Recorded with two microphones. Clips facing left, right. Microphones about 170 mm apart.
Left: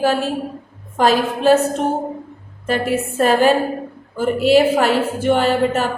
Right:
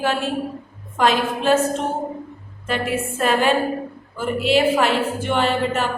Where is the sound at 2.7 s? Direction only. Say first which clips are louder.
Left 4 dB; 40° left (ahead or behind).